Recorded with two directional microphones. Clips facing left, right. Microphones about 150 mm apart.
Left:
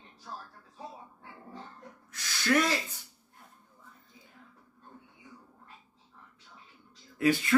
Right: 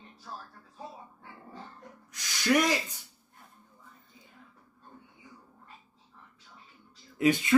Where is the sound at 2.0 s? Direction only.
15° right (ahead or behind).